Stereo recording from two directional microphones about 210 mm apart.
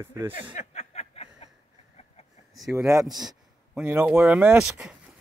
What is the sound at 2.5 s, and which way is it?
Speech, centre (ahead or behind).